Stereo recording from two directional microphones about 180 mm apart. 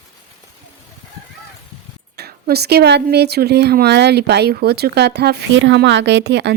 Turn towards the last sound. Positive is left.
turn(degrees=-70)  # may be behind; listen again after turning